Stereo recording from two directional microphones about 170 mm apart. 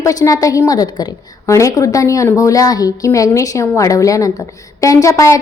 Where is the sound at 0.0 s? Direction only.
20° left (ahead or behind).